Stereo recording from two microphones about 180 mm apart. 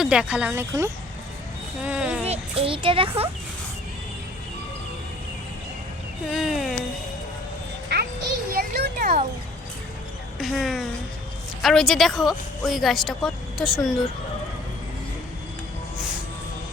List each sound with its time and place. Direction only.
0.0 s speech: 5° right (ahead or behind)
2.2 s a child's voice: 35° right (ahead or behind)
6.3 s speech: centre (ahead or behind)
8.5 s a sound: 55° right (ahead or behind)
10.3 s a woman's voice: centre (ahead or behind)